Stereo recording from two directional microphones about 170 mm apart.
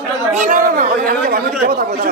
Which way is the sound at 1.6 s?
65° right (ahead or behind).